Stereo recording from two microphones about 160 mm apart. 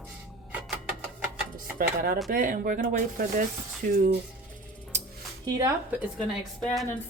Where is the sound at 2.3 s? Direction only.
60° right (ahead or behind).